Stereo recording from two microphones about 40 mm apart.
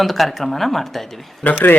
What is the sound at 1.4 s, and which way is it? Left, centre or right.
Speech, left.